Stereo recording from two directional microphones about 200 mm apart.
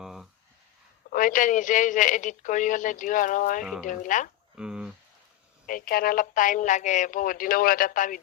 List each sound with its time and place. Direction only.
0.0 s a sound: centre (ahead or behind)
1.1 s speech: 40° left (ahead or behind)
3.6 s speech: centre (ahead or behind)
3.8 s speech: 40° left (ahead or behind)
4.5 s a sound: 5° right (ahead or behind)
5.6 s speech: 45° left (ahead or behind)